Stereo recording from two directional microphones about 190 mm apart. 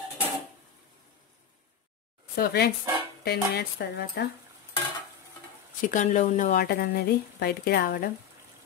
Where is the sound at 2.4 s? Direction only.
55° left (ahead or behind).